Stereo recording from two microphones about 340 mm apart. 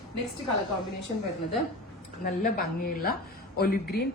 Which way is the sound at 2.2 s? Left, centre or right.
Left.